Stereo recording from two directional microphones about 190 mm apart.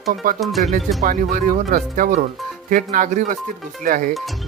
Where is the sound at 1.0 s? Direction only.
45° right (ahead or behind).